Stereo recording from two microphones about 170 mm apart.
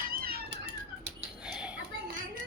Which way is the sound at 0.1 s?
60° right (ahead or behind).